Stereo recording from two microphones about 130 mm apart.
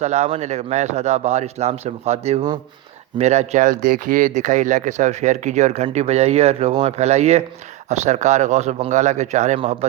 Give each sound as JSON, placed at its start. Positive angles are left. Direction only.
{"t": 0.0, "sound": "speech", "side_deg": -60}